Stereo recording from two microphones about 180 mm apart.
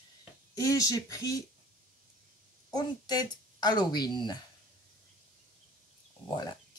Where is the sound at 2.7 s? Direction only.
25° left (ahead or behind).